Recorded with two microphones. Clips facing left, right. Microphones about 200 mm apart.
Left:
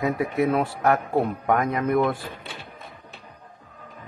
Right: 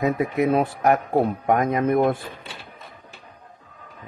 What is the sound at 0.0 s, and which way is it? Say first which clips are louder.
Speech: right 2 dB; 20° right (ahead or behind).